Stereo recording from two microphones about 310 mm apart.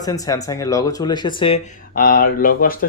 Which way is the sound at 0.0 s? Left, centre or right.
Centre.